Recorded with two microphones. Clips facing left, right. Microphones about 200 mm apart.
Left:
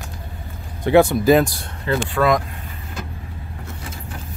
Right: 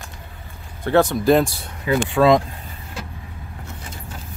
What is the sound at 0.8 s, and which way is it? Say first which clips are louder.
Speech: left 2 dB; 10° left (ahead or behind).